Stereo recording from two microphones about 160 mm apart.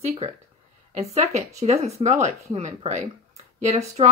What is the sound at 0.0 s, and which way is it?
Speech, 40° right (ahead or behind).